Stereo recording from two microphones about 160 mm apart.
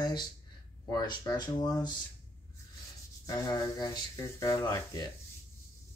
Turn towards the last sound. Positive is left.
turn(degrees=20)  # may be behind; listen again after turning